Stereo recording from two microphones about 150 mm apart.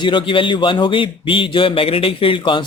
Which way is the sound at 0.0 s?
35° left (ahead or behind).